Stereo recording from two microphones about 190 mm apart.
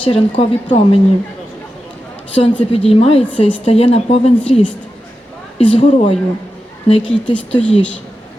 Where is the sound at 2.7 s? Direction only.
30° left (ahead or behind).